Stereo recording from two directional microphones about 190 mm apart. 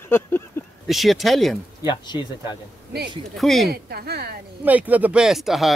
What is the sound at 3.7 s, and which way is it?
Speech, 55° right (ahead or behind).